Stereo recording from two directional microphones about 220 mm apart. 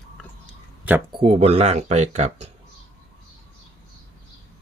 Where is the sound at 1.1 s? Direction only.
25° right (ahead or behind).